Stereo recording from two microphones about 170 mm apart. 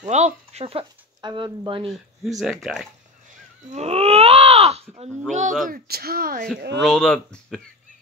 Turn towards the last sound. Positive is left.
turn(degrees=5)  # may be behind; listen again after turning